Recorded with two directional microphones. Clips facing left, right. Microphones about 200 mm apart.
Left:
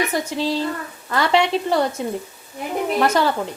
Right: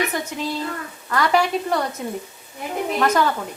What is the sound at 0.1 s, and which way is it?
A woman's voice, 30° left (ahead or behind).